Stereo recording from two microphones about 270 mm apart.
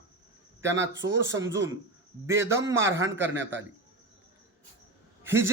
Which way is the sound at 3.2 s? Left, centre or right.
Right.